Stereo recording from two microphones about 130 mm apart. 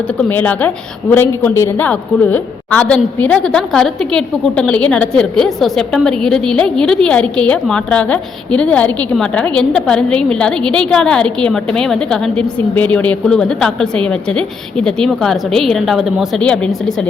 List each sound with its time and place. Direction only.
0.2 s a woman's voice: 15° left (ahead or behind)